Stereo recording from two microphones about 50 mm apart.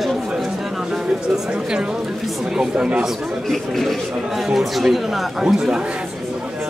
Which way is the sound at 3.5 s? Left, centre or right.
Centre.